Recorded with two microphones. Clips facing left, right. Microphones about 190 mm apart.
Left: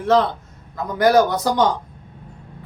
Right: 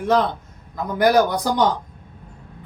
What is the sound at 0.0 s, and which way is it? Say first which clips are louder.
A man's voice: left 2 dB; 15° right (ahead or behind).